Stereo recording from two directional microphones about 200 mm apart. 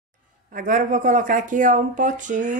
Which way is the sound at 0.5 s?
45° right (ahead or behind).